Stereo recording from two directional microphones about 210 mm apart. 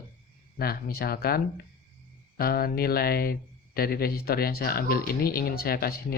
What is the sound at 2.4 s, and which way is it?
Speech, 45° left (ahead or behind).